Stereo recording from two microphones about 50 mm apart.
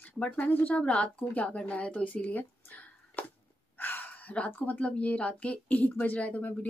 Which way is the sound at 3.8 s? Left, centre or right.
Left.